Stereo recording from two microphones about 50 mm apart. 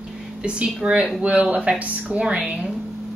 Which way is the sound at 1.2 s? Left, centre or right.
Right.